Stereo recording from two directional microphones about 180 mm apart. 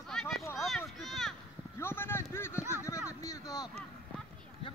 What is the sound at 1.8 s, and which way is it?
Speech, 15° left (ahead or behind).